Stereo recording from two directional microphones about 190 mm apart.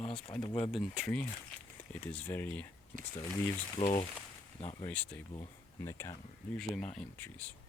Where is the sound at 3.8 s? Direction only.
30° left (ahead or behind).